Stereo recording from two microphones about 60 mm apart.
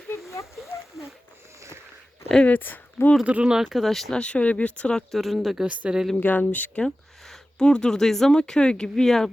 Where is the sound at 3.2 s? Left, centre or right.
Centre.